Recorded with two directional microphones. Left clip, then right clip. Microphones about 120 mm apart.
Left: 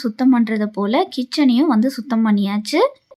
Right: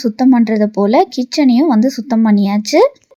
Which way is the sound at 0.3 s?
25° right (ahead or behind).